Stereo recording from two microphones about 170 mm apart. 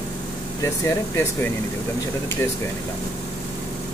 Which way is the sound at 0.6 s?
15° left (ahead or behind).